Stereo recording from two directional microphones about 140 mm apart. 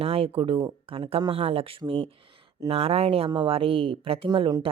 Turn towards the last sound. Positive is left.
turn(degrees=-35)  # may be behind; listen again after turning